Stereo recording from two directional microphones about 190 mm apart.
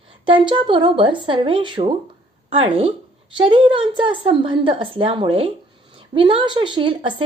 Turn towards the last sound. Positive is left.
turn(degrees=-25)  # may be behind; listen again after turning